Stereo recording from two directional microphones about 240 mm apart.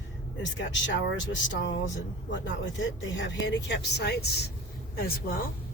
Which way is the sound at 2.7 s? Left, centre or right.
Left.